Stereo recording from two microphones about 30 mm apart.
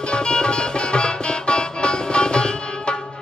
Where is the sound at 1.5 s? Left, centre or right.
Left.